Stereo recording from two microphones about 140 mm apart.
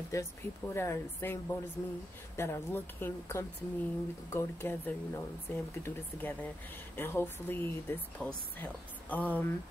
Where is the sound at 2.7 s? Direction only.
15° left (ahead or behind).